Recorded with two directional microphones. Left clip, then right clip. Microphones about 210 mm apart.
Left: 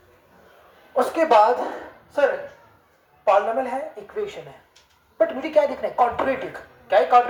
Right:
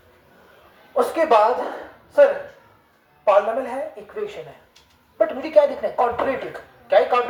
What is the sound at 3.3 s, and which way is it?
Speech, 20° left (ahead or behind).